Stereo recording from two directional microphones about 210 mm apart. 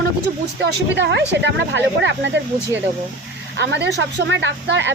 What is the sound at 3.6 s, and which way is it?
A woman's voice, 55° right (ahead or behind).